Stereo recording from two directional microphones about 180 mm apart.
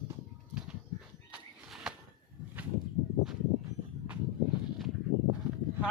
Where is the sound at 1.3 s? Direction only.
5° right (ahead or behind).